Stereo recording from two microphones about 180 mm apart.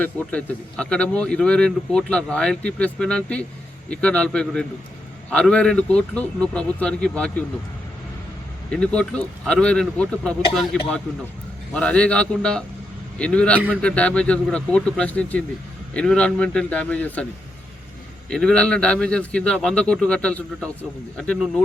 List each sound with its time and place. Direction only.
0.0 s a man's voice: 10° left (ahead or behind)
8.7 s a man's voice: 5° left (ahead or behind)
18.3 s a man's voice: 5° left (ahead or behind)
21.3 s a man's voice: 5° right (ahead or behind)